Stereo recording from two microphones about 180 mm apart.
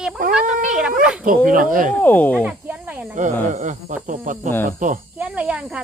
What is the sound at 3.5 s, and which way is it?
Speech, 45° right (ahead or behind).